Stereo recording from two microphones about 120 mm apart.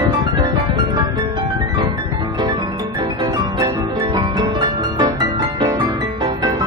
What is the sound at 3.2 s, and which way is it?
Music, 35° right (ahead or behind).